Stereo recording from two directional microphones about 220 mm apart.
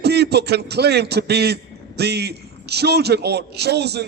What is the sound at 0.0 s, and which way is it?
A man's voice, 50° right (ahead or behind).